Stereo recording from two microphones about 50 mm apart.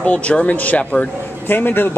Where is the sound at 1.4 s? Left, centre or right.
Left.